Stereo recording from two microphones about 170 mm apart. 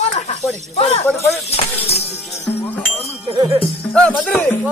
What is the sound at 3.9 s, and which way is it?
Speech, 5° left (ahead or behind).